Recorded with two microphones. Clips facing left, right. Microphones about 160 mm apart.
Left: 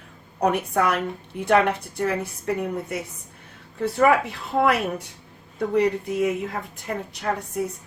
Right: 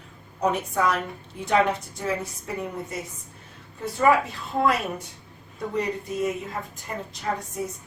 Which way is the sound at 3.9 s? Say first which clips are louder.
Left 1 dB; 70° left (ahead or behind).